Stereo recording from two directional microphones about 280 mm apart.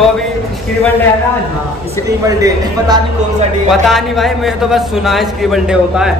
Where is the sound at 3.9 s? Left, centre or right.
Centre.